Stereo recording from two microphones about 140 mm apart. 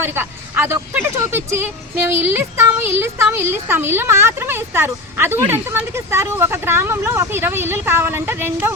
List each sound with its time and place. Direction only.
0.0 s speech: 15° right (ahead or behind)